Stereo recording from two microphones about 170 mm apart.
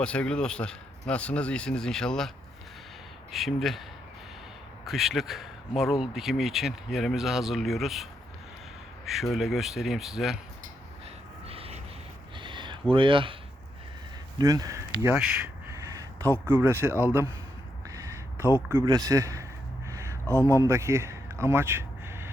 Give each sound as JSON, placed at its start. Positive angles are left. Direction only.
{"t": 0.0, "sound": "speech", "side_deg": 5}
{"t": 3.3, "sound": "speech", "side_deg": 0}
{"t": 4.9, "sound": "speech", "side_deg": 0}
{"t": 9.0, "sound": "speech", "side_deg": 0}
{"t": 11.4, "sound": "a sound", "side_deg": -35}
{"t": 12.9, "sound": "speech", "side_deg": -30}
{"t": 14.3, "sound": "speech", "side_deg": -20}
{"t": 15.6, "sound": "a sound", "side_deg": -20}
{"t": 18.7, "sound": "speech", "side_deg": -20}
{"t": 19.9, "sound": "a sound", "side_deg": -15}